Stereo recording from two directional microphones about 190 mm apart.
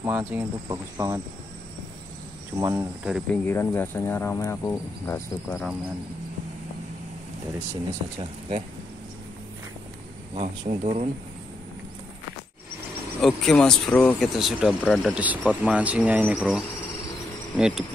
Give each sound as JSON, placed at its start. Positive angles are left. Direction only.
{"t": 0.0, "sound": "speech", "side_deg": -10}
{"t": 2.6, "sound": "speech", "side_deg": -10}
{"t": 3.4, "sound": "speech", "side_deg": 10}
{"t": 8.2, "sound": "speech", "side_deg": -30}
{"t": 10.3, "sound": "speech", "side_deg": -35}
{"t": 13.2, "sound": "speech", "side_deg": 5}